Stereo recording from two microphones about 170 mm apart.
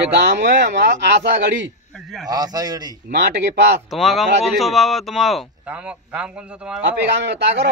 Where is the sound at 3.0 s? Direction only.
85° right.